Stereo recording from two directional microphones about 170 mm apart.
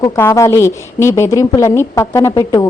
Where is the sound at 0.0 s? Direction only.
15° left (ahead or behind).